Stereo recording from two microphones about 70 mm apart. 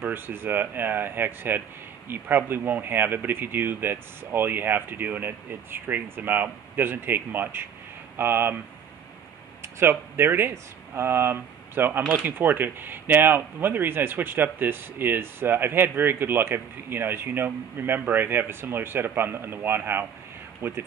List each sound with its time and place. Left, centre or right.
0.0 s speech: right
9.6 s speech: right